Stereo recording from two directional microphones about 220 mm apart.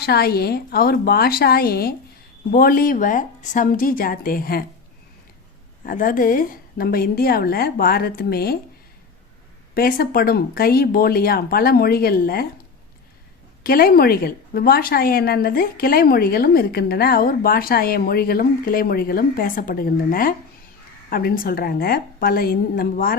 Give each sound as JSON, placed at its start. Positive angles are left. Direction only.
{"t": 0.0, "sound": "a woman's voice", "side_deg": 45}
{"t": 5.8, "sound": "a woman's voice", "side_deg": 40}
{"t": 9.7, "sound": "a woman's voice", "side_deg": 40}
{"t": 13.7, "sound": "a woman's voice", "side_deg": 40}